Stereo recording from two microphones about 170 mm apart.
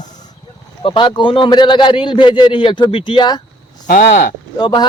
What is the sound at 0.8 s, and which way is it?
Speech, 30° left (ahead or behind).